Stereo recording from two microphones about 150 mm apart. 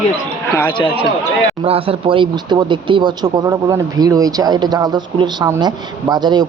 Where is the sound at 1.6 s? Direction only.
40° right (ahead or behind).